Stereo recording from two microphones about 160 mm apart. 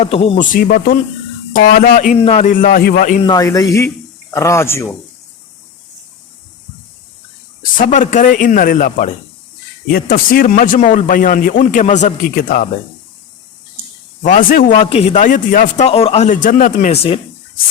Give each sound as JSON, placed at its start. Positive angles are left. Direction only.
{"t": 0.0, "sound": "speech", "side_deg": 40}
{"t": 0.3, "sound": "speech", "side_deg": 55}
{"t": 2.2, "sound": "speech", "side_deg": 40}
{"t": 2.5, "sound": "speech", "side_deg": 60}
{"t": 3.2, "sound": "speech", "side_deg": 20}
{"t": 7.6, "sound": "speech", "side_deg": 55}
{"t": 9.9, "sound": "speech", "side_deg": 65}
{"t": 14.2, "sound": "a man's voice", "side_deg": 55}
{"t": 14.8, "sound": "a man's voice", "side_deg": 40}
{"t": 15.9, "sound": "a man's voice", "side_deg": 40}
{"t": 16.9, "sound": "speech", "side_deg": 35}